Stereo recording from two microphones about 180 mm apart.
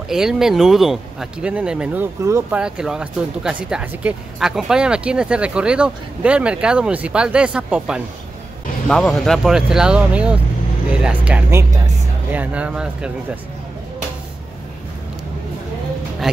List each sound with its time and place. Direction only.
0.1 s speech: 5° right (ahead or behind)
2.6 s speech: 5° right (ahead or behind)